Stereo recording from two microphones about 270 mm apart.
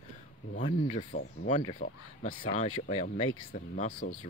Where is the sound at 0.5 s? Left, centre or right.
Left.